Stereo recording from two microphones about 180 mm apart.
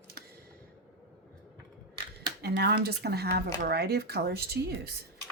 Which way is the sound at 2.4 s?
65° right (ahead or behind).